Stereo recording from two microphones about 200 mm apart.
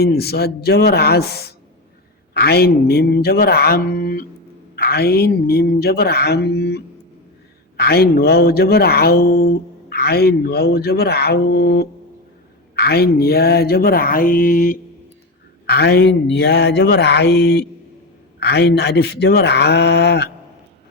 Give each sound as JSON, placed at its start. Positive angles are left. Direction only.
{"t": 0.0, "sound": "speech", "side_deg": 50}
{"t": 15.6, "sound": "speech", "side_deg": 55}